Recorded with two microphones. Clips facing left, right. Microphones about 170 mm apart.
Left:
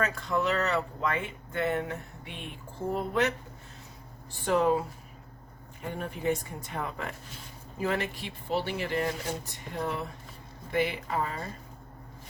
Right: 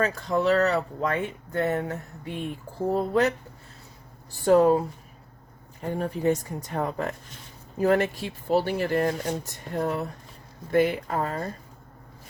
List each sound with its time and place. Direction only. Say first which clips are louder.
0.0 s speech: right 5 dB; 35° right (ahead or behind)
4.4 s speech: right 7 dB; 40° right (ahead or behind)
5.9 s speech: right 6 dB; 40° right (ahead or behind)